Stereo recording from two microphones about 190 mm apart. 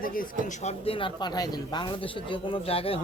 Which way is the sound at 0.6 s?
30° left (ahead or behind).